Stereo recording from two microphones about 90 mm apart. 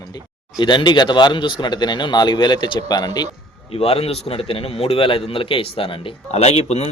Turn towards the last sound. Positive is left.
turn(degrees=85)